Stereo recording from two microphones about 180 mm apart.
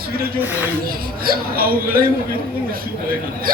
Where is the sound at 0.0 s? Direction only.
60° right (ahead or behind).